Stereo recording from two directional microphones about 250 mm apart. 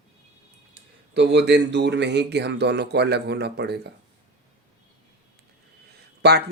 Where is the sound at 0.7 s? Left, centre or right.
Right.